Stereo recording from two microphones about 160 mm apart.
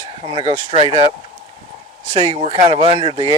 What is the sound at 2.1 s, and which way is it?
Speech, 30° right (ahead or behind).